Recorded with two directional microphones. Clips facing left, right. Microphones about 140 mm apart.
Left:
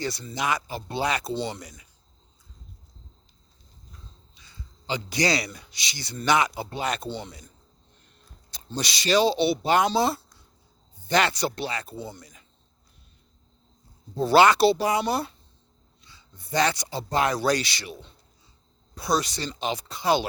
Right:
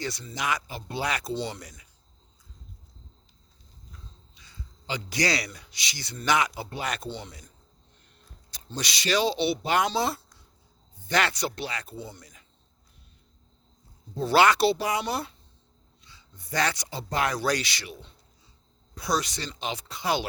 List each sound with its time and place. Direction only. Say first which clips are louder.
0.0 s speech: left 3 dB; 35° left (ahead or behind); by 1.9 s 20° left (ahead or behind)
4.9 s speech: left 3 dB; 25° left (ahead or behind)
8.4 s speech: left 3 dB; 30° left (ahead or behind)
14.2 s speech: left 3 dB; 30° left (ahead or behind)